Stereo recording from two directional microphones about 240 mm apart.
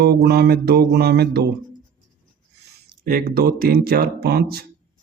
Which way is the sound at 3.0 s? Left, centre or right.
Right.